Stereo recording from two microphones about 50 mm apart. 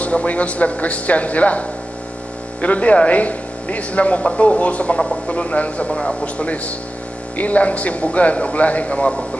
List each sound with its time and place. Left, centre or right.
0.0 s speech: left